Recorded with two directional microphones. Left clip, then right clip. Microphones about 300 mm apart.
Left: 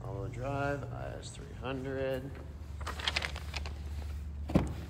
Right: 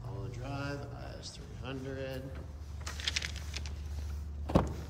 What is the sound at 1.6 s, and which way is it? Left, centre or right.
Speech, centre.